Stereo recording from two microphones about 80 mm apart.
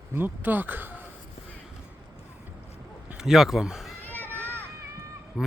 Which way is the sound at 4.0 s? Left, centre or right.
Left.